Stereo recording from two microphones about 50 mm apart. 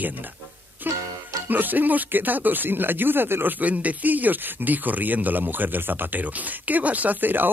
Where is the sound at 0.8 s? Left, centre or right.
Right.